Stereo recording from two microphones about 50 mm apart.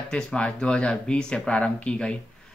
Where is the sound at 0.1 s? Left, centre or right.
Left.